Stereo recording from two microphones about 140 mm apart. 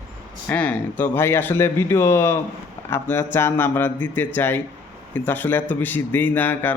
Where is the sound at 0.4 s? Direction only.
10° left (ahead or behind).